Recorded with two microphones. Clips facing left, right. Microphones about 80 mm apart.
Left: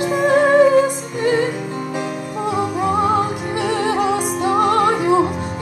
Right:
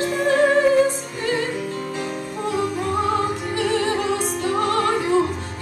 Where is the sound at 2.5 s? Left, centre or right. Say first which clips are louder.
Left 4 dB; centre.